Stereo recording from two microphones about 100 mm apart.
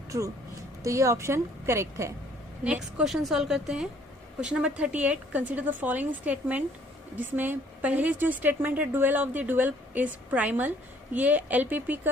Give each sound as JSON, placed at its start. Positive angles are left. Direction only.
{"t": 0.1, "sound": "a woman's voice", "side_deg": -35}
{"t": 2.6, "sound": "a woman's voice", "side_deg": -5}